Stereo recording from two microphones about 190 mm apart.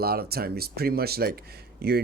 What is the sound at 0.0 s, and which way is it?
Speech, 55° right (ahead or behind).